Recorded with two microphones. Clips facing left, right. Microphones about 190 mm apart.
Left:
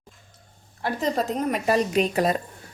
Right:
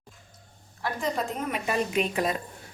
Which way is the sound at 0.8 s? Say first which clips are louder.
Left 4 dB; 35° left (ahead or behind).